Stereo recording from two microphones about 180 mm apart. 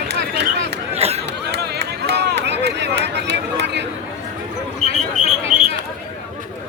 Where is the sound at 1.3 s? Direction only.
70° right (ahead or behind).